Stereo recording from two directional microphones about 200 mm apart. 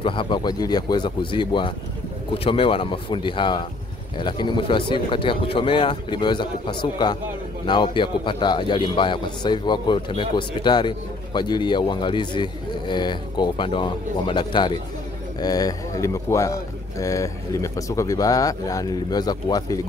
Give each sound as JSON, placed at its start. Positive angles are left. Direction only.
{"t": 0.0, "sound": "a man's voice", "side_deg": 25}